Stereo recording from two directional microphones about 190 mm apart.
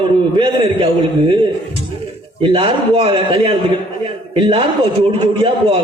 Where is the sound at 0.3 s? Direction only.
30° right (ahead or behind).